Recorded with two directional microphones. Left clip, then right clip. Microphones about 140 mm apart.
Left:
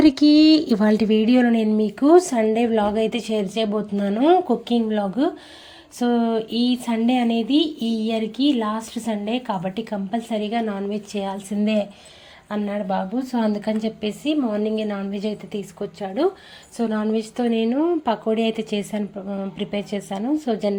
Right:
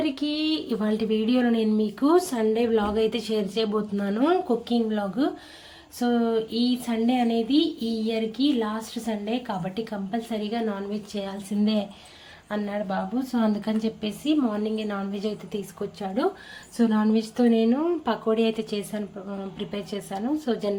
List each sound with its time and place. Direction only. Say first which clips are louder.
0.0 s speech: left 12 dB; 55° left (ahead or behind); by 20.7 s 20° left (ahead or behind)